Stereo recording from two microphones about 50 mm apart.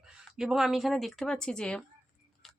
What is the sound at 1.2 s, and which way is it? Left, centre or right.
Speech, centre.